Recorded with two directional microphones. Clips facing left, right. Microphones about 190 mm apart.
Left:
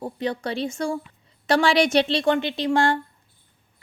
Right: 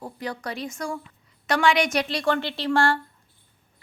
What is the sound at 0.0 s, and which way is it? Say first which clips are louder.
A woman's voice: left 5 dB; 25° left (ahead or behind).